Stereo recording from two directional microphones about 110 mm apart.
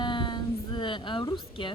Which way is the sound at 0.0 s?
45° left (ahead or behind).